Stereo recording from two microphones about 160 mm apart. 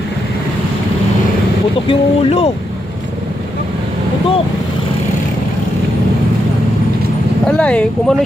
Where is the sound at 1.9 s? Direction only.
40° left (ahead or behind).